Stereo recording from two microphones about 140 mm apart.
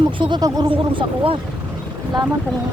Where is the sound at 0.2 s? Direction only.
35° right (ahead or behind).